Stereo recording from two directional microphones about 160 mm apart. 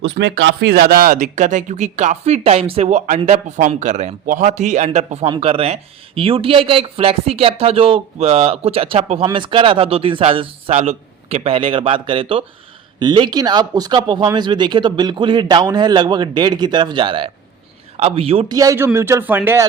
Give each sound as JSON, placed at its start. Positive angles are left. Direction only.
{"t": 0.0, "sound": "a man's voice", "side_deg": -90}
{"t": 18.5, "sound": "a man's voice", "side_deg": -20}